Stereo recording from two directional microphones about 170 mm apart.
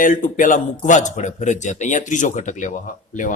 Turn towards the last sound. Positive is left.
turn(degrees=50)  # may be behind; listen again after turning